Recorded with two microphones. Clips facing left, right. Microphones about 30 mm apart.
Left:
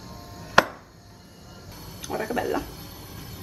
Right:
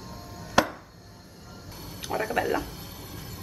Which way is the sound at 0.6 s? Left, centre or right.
Left.